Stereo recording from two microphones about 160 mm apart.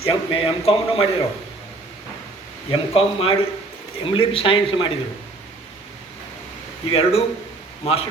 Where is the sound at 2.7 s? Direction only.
35° left (ahead or behind).